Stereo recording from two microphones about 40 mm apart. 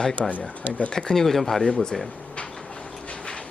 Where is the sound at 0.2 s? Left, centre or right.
Left.